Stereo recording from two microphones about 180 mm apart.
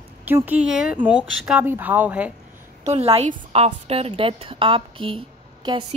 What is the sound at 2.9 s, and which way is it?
A woman's voice, 35° right (ahead or behind).